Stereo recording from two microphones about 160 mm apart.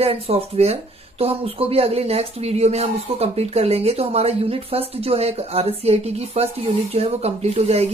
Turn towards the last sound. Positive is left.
turn(degrees=-40)  # may be behind; listen again after turning